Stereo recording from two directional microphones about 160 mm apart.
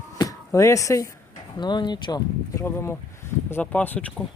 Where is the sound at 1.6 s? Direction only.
25° left (ahead or behind); by 4.2 s 10° left (ahead or behind).